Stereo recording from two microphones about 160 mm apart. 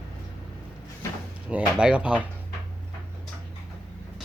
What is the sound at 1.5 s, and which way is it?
Speech, 5° right (ahead or behind).